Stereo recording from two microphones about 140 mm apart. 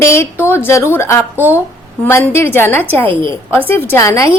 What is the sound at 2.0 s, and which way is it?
A woman's voice, 15° left (ahead or behind).